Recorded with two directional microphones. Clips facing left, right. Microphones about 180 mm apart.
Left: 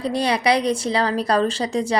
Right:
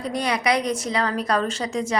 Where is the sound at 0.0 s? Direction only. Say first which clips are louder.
Left 3 dB; 30° left (ahead or behind).